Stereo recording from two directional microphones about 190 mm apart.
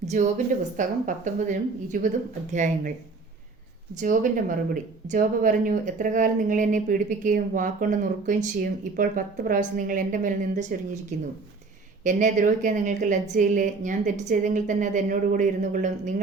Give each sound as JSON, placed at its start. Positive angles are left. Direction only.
{"t": 0.1, "sound": "a woman's voice", "side_deg": -40}
{"t": 3.9, "sound": "speech", "side_deg": -45}
{"t": 12.0, "sound": "a woman's voice", "side_deg": -40}